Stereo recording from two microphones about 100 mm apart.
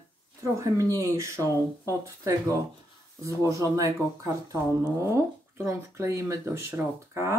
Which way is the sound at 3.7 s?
30° right (ahead or behind).